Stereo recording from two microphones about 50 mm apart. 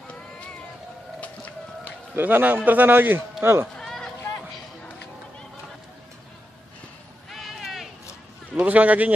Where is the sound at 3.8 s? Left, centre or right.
Centre.